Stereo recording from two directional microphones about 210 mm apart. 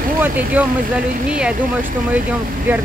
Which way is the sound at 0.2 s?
10° right (ahead or behind).